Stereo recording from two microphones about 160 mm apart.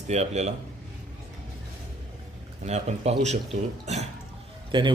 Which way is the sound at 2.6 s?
45° right (ahead or behind).